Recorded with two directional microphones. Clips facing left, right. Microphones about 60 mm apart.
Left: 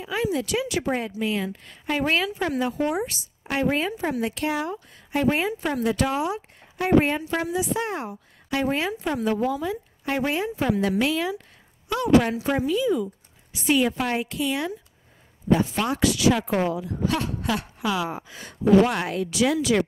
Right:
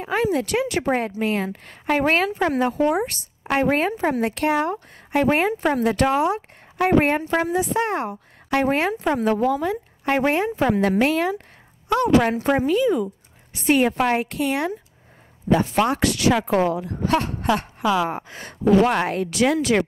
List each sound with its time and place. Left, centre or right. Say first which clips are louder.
0.0 s speech: right 4 dB; right
15.5 s speech: right 3 dB; right